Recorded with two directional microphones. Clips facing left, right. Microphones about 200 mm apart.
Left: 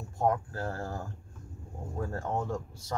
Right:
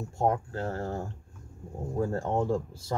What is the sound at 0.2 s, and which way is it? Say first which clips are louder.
Speech: right 1 dB; 25° right (ahead or behind).